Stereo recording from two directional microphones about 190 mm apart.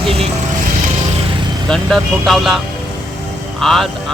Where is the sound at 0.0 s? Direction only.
30° right (ahead or behind).